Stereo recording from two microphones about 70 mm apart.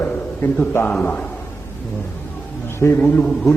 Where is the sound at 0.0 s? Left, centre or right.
Left.